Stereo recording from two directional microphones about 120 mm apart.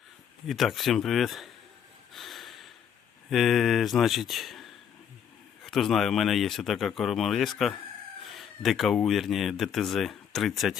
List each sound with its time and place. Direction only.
0.4 s speech: centre (ahead or behind)
2.1 s snort: centre (ahead or behind)
3.2 s speech: centre (ahead or behind)
8.2 s a sound: centre (ahead or behind)
9.0 s speech: centre (ahead or behind)